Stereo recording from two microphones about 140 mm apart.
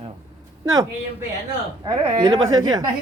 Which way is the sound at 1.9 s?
35° right (ahead or behind).